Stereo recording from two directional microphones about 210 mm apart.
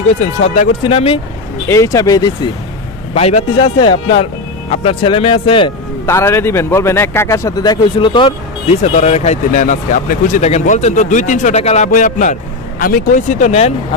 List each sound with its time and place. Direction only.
0.1 s speech: 30° left (ahead or behind)
1.7 s speech: 15° left (ahead or behind)
3.2 s speech: 30° left (ahead or behind)
6.1 s speech: 10° left (ahead or behind); by 13.7 s 30° left (ahead or behind)